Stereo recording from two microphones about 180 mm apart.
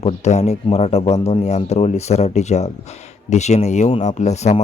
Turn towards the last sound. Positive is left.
turn(degrees=40)  # may be behind; listen again after turning